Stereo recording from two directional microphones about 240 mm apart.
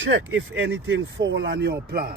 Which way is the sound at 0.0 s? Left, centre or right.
Right.